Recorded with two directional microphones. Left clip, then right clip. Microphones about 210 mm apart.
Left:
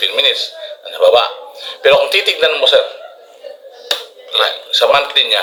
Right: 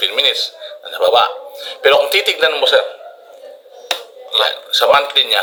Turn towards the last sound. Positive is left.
turn(degrees=-55)  # may be behind; listen again after turning